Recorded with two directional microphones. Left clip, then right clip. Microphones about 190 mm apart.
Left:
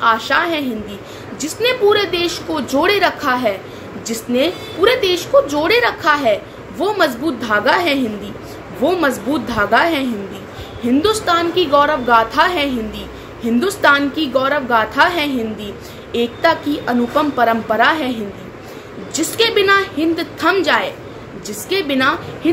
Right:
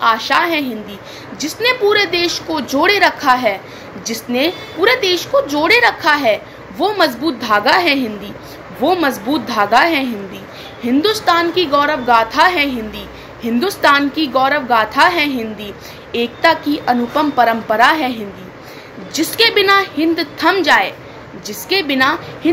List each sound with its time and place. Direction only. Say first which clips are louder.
0.0 s a woman's voice: right 1 dB; 15° left (ahead or behind)